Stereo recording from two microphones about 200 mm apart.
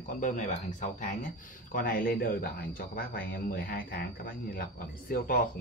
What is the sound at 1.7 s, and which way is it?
Speech, 45° left (ahead or behind).